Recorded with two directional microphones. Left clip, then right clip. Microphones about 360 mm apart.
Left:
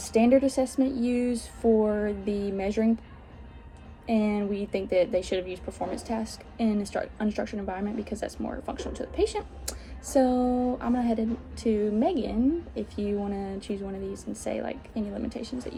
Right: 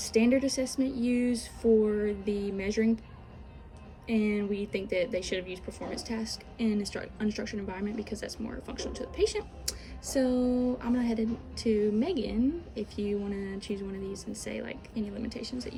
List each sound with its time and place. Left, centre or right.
0.0 s a woman's voice: centre
4.0 s a woman's voice: centre
14.1 s a woman's voice: centre
14.5 s a woman's voice: centre